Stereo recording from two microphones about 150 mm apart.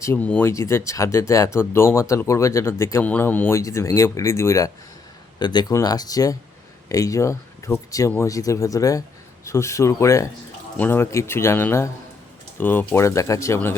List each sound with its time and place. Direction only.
0.0 s speech: 15° left (ahead or behind)